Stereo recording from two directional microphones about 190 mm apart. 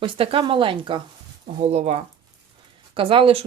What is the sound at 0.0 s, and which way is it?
Speech, 30° right (ahead or behind).